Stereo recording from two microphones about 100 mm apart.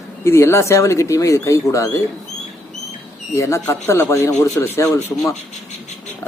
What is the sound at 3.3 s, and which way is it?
Speech, 30° left (ahead or behind).